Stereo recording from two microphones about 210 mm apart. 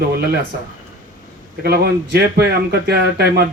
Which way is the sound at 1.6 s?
50° right (ahead or behind).